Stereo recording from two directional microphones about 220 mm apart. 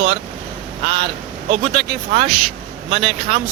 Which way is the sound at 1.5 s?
25° right (ahead or behind).